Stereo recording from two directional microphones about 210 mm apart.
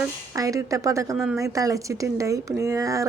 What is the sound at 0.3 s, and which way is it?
Speech, 15° right (ahead or behind).